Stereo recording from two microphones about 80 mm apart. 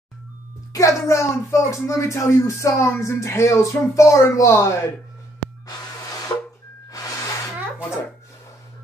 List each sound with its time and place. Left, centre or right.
0.7 s speech: left
6.3 s a sound: left
6.9 s music: left